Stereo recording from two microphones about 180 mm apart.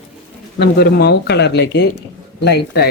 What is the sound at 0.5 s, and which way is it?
Speech, 65° left (ahead or behind).